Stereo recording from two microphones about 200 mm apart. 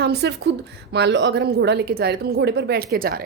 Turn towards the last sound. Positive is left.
turn(degrees=-50)  # may be behind; listen again after turning